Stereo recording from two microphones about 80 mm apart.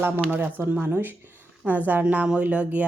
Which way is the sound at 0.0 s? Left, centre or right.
Right.